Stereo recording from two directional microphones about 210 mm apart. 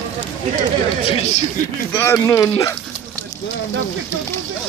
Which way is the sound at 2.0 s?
15° left (ahead or behind).